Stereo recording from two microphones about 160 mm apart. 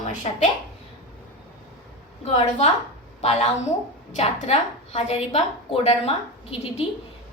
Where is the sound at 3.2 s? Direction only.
45° left (ahead or behind).